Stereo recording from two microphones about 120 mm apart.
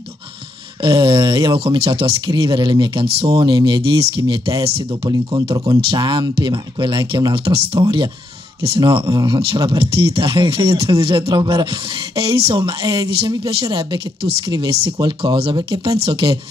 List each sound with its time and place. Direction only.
0.8 s speech: 40° right (ahead or behind)
5.1 s speech: 45° right (ahead or behind)
9.1 s speech: 35° right (ahead or behind)
9.7 s speech: 50° right (ahead or behind)
12.5 s speech: 30° right (ahead or behind)
13.3 s speech: 45° right (ahead or behind)